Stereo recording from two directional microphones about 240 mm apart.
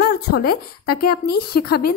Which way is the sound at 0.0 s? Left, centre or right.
Left.